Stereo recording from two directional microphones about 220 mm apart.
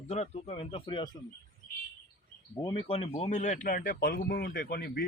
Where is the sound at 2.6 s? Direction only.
25° left (ahead or behind); by 5.0 s 45° left (ahead or behind).